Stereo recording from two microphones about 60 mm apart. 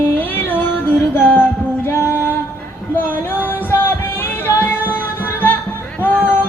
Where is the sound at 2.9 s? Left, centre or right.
Left.